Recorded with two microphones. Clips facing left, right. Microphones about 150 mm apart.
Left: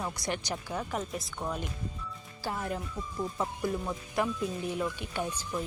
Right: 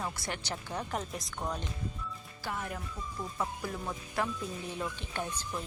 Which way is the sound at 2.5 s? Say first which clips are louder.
Left 4 dB; 30° left (ahead or behind).